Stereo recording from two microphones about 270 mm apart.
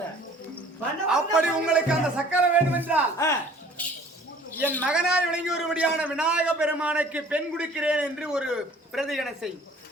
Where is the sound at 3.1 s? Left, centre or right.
Centre.